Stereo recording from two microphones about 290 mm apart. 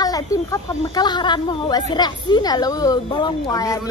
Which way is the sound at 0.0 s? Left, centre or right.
Centre.